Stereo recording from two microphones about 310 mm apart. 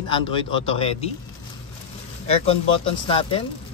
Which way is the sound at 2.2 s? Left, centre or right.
Centre.